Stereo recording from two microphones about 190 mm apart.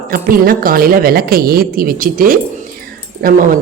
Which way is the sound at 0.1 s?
50° right (ahead or behind).